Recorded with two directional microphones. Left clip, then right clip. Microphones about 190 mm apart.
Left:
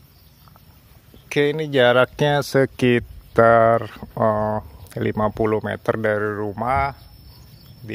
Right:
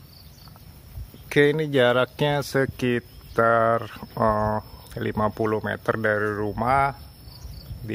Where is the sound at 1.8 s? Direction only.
25° left (ahead or behind).